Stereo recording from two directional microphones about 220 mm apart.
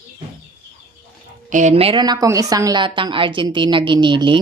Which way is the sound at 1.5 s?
30° right (ahead or behind).